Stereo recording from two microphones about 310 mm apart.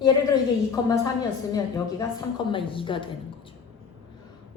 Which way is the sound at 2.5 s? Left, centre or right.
Centre.